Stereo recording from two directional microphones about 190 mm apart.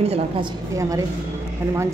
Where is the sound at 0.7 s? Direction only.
15° right (ahead or behind).